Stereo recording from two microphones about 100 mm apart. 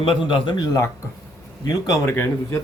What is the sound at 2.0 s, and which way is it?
Speech, 25° left (ahead or behind).